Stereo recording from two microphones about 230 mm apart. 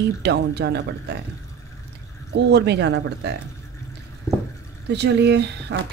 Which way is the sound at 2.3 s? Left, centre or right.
Right.